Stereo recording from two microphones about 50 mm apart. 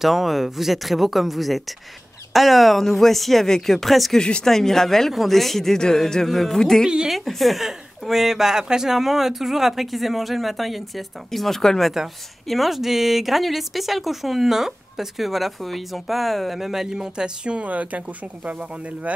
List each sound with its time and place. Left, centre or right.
0.0 s speech: centre
4.2 s speech: centre
4.5 s speech: centre
12.4 s speech: centre; by 19.1 s right